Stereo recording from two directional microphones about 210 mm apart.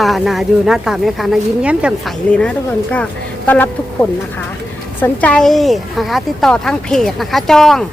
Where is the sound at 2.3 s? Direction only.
5° left (ahead or behind).